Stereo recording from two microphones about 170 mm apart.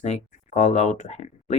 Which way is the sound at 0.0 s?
45° left (ahead or behind).